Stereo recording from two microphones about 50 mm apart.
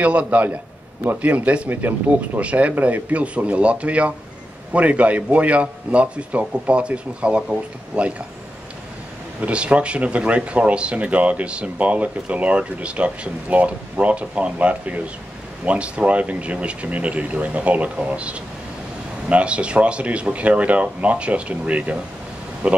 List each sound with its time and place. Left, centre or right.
0.0 s speech: right
1.7 s speech: right
9.4 s speech: right